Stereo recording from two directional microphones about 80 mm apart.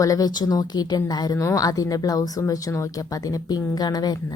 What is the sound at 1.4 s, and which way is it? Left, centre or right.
A woman's voice, left.